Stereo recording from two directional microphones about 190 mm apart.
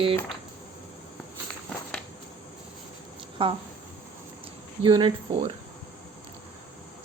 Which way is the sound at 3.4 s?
30° right (ahead or behind).